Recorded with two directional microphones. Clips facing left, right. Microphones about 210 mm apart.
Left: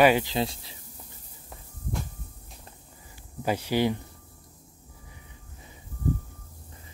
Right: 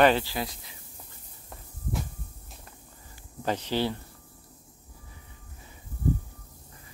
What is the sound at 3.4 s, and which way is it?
Speech, 10° left (ahead or behind).